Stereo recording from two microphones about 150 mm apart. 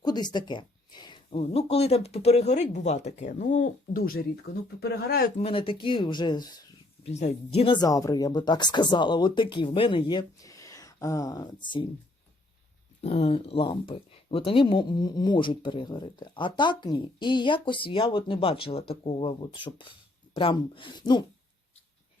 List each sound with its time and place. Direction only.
0.0 s speech: 30° left (ahead or behind)
1.3 s speech: 45° left (ahead or behind); by 4.2 s 75° left (ahead or behind)
4.8 s speech: 90° left
5.4 s speech: 35° left (ahead or behind)
7.0 s speech: 45° left (ahead or behind)
7.8 s speech: 25° left (ahead or behind)
13.0 s speech: 40° left (ahead or behind)